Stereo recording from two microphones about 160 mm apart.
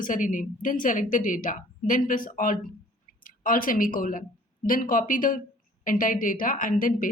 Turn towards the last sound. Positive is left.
turn(degrees=55)  # may be behind; listen again after turning